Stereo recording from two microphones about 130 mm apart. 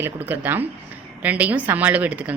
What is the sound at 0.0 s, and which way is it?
A woman's voice, 15° right (ahead or behind).